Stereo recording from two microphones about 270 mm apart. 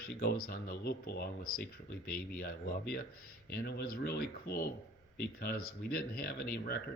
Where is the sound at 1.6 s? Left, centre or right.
Left.